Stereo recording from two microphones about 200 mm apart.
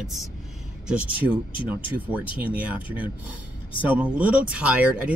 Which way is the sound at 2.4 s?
10° right (ahead or behind).